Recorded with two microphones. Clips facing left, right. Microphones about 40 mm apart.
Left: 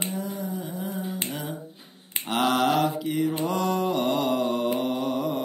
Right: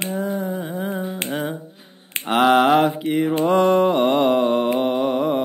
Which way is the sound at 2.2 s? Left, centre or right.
Right.